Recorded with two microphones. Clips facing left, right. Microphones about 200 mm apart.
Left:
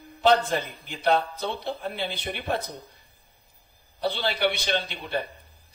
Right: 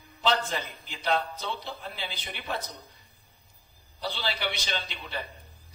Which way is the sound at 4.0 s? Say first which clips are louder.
Left 7 dB; 55° left (ahead or behind).